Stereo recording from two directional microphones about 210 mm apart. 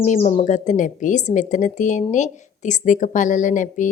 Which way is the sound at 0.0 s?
35° left (ahead or behind).